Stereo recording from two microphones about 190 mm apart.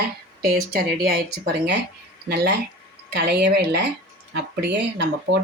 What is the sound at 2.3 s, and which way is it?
Speech, 60° right (ahead or behind).